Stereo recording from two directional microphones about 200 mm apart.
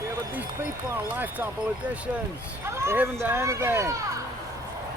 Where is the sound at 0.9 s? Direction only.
10° right (ahead or behind).